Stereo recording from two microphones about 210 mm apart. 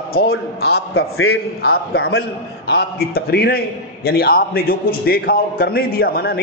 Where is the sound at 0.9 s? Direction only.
85° left.